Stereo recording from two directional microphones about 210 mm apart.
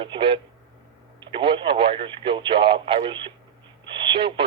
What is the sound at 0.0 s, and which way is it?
Speech, 25° right (ahead or behind).